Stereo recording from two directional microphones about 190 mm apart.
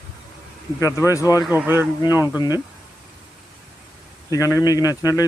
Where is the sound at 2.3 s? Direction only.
20° left (ahead or behind).